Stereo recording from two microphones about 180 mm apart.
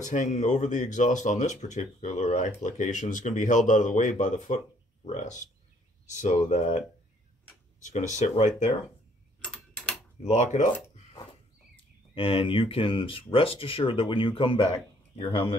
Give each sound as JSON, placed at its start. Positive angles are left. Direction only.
{"t": 0.0, "sound": "speech", "side_deg": 45}
{"t": 7.8, "sound": "speech", "side_deg": 40}
{"t": 10.2, "sound": "speech", "side_deg": 40}
{"t": 12.2, "sound": "speech", "side_deg": 30}